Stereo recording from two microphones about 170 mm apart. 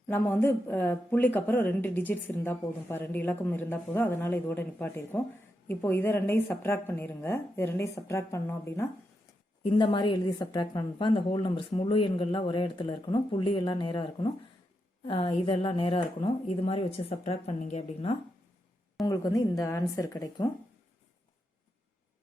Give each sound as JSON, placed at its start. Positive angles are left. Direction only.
{"t": 0.1, "sound": "speech", "side_deg": 10}
{"t": 9.6, "sound": "a woman's voice", "side_deg": 30}
{"t": 19.0, "sound": "a woman's voice", "side_deg": 20}